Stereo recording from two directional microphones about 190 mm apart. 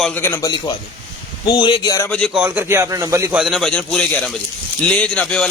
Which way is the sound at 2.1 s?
5° left (ahead or behind).